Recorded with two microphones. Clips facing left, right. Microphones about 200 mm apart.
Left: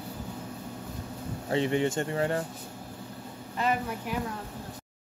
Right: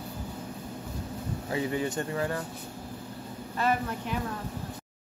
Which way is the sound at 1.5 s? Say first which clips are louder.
Left 4 dB; 25° left (ahead or behind).